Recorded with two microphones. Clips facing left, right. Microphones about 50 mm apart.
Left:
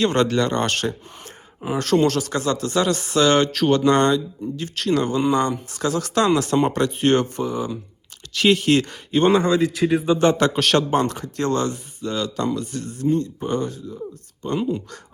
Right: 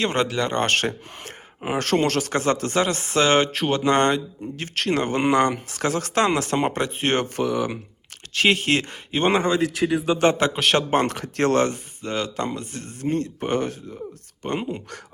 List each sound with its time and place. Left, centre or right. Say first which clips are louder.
0.0 s speech: left 4 dB; right
0.7 s speech: right 2 dB; right
7.3 s speech: right 2 dB; right
8.3 s speech: left 3 dB; right
10.4 s speech: left 2 dB; centre
10.9 s speech: even; right